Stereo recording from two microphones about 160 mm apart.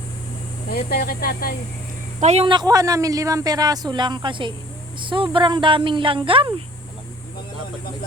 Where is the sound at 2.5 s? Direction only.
25° right (ahead or behind).